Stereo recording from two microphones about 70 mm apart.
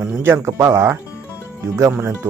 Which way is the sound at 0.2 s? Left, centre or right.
Right.